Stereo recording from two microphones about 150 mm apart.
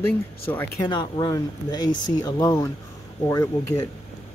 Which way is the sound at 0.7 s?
30° left (ahead or behind).